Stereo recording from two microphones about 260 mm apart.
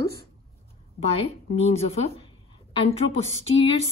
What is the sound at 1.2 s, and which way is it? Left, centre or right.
Speech, left.